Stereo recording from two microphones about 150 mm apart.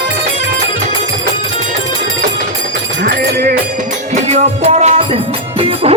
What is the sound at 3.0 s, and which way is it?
Music, 80° right.